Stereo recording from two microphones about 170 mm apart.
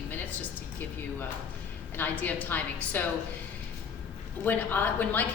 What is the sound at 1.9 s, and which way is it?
A woman's voice, 10° left (ahead or behind).